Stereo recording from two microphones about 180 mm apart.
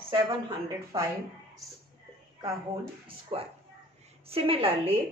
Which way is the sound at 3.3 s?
30° right (ahead or behind).